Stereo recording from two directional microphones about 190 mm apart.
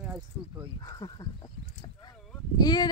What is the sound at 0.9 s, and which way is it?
Speech, 20° left (ahead or behind).